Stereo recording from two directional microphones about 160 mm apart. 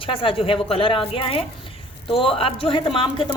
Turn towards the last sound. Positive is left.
turn(degrees=35)  # may be behind; listen again after turning